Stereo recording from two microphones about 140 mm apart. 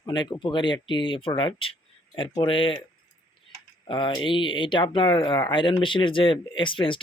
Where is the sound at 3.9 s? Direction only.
35° left (ahead or behind).